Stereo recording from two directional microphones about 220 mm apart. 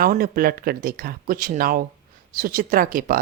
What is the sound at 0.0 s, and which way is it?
Speech, 40° right (ahead or behind).